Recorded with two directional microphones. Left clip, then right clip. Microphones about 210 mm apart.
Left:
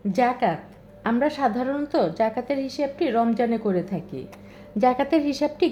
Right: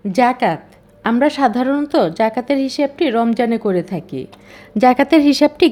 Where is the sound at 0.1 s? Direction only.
25° right (ahead or behind).